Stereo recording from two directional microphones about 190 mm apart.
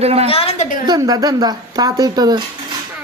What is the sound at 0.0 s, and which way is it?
Speech, 35° right (ahead or behind).